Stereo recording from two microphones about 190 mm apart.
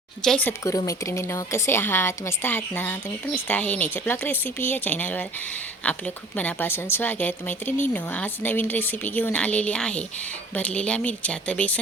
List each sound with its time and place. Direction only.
0.2 s a woman's voice: 5° left (ahead or behind)